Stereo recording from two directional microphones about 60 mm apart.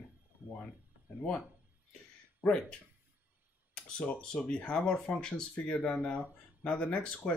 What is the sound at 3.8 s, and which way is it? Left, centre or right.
Speech, centre.